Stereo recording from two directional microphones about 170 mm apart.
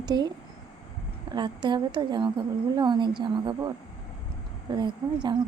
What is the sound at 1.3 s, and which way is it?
A woman's voice, 25° right (ahead or behind).